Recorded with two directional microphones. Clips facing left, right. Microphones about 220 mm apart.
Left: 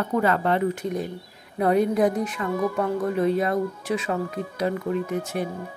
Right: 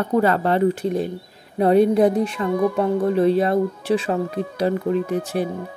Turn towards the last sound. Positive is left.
turn(degrees=-35)  # may be behind; listen again after turning